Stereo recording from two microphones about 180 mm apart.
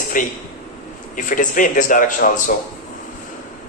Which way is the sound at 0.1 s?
45° left (ahead or behind).